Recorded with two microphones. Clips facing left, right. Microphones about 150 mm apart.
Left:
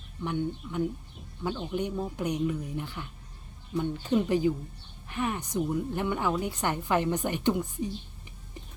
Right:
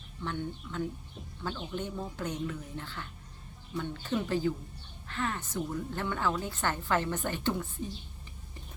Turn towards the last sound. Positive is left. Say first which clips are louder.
# left 5 dB
turn(degrees=15)  # may be behind; listen again after turning